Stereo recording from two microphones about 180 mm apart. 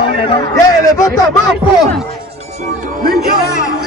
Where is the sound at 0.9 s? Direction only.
20° left (ahead or behind).